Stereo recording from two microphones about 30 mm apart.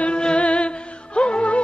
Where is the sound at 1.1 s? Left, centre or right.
Left.